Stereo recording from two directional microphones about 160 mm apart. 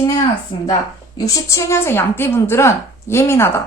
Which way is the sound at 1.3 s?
20° left (ahead or behind).